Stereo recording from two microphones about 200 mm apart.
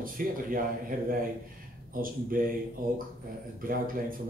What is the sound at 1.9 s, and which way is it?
Speech, 45° right (ahead or behind).